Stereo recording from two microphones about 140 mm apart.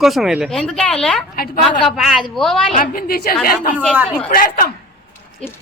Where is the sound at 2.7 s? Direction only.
90° left.